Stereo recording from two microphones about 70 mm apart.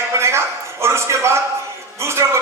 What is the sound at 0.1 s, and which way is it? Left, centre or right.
A man's voice, right.